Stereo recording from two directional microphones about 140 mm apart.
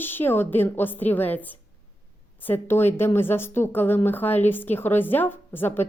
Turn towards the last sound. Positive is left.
turn(degrees=15)  # may be behind; listen again after turning